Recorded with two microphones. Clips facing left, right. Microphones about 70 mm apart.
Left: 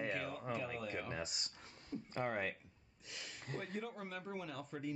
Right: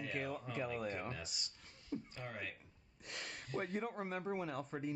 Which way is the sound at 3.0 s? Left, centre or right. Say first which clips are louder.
Right 4 dB; right.